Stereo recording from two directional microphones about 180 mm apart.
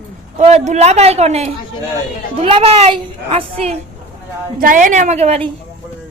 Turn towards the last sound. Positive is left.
turn(degrees=-35)  # may be behind; listen again after turning